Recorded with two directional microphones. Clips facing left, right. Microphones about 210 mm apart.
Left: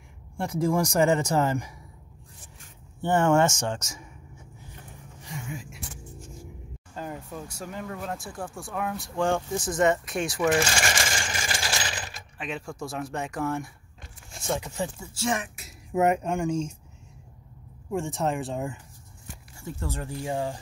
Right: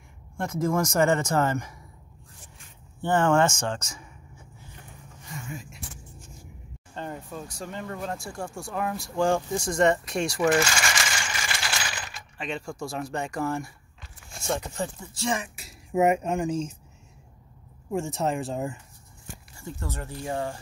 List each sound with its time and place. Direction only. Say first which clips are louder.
0.4 s speech: left 1 dB; 10° left (ahead or behind)
3.4 s speech: even; 20° left (ahead or behind)
7.0 s speech: even; 10° left (ahead or behind)
10.7 s coin: left 2 dB; 35° left (ahead or behind)
12.4 s speech: right 1 dB; 5° left (ahead or behind)
17.9 s speech: even; centre (ahead or behind)
19.6 s speech: left 2 dB; 15° left (ahead or behind)